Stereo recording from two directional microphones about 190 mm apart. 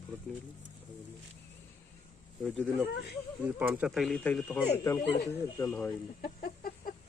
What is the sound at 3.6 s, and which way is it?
Speech, 5° right (ahead or behind).